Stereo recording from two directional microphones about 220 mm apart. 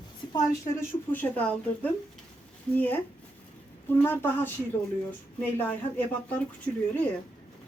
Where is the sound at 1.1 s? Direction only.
5° left (ahead or behind).